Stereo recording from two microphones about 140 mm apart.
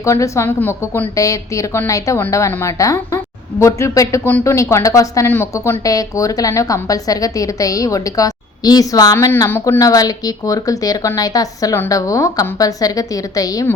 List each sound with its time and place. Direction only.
0.0 s a woman's voice: 20° left (ahead or behind)